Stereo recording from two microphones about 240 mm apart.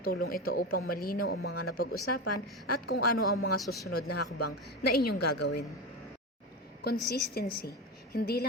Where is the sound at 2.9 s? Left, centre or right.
Left.